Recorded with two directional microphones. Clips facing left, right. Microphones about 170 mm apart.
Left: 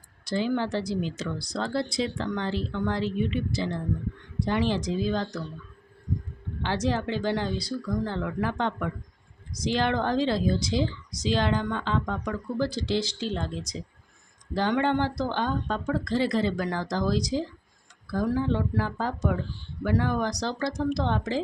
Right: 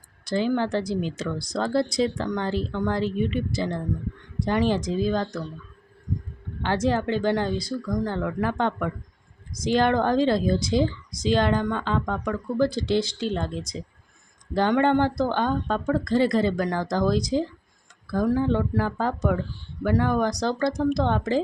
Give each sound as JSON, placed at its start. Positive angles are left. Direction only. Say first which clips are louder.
{"t": 0.3, "sound": "a woman's voice", "louder": "right 3 dB", "side_deg": -50}
{"t": 6.6, "sound": "a woman's voice", "louder": "right 4 dB", "side_deg": -50}